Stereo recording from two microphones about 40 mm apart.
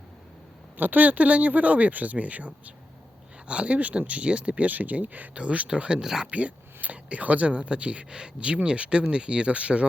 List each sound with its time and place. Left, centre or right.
0.8 s speech: right
5.4 s speech: right
6.0 s speech: centre
6.8 s speech: right